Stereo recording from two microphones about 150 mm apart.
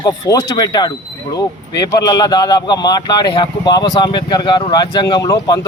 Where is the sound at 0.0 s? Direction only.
25° left (ahead or behind).